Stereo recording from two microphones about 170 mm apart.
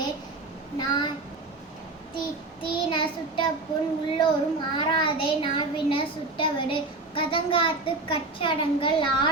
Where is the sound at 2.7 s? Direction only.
30° left (ahead or behind).